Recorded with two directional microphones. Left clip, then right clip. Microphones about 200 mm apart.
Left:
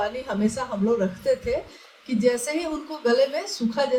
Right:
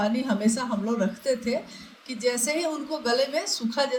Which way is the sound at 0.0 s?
40° right (ahead or behind).